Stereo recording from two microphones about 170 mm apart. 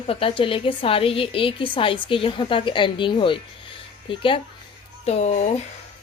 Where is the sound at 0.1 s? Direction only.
30° left (ahead or behind).